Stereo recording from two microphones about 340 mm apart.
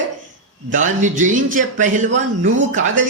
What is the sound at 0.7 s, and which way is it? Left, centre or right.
A man's voice, right.